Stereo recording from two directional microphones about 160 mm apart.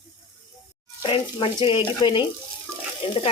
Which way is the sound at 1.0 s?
30° left (ahead or behind).